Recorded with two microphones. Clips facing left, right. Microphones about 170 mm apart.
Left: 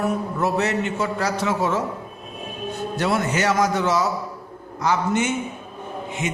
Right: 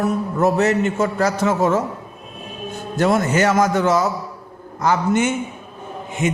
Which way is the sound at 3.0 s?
45° right (ahead or behind).